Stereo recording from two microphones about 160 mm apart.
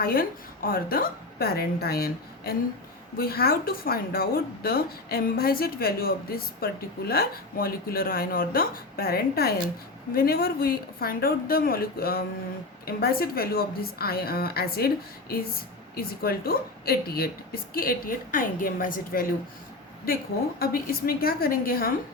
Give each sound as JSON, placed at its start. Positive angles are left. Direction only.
{"t": 0.0, "sound": "a woman's voice", "side_deg": 65}
{"t": 16.0, "sound": "a woman's voice", "side_deg": 70}
{"t": 20.6, "sound": "a woman's voice", "side_deg": 65}